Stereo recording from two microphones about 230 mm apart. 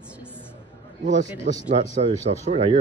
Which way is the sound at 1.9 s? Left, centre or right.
Right.